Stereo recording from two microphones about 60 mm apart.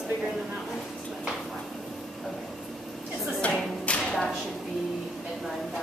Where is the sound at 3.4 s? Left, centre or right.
Left.